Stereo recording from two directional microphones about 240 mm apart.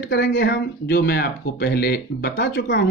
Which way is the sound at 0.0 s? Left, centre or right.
Left.